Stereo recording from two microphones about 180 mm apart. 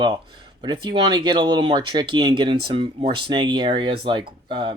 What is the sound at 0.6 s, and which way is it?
Speech, 25° right (ahead or behind).